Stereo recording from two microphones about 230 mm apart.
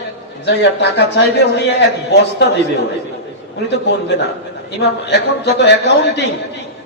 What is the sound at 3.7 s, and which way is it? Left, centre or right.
Speech, left.